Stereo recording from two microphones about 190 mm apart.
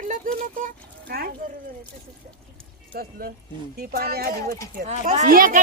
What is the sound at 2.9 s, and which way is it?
Speech, 50° right (ahead or behind).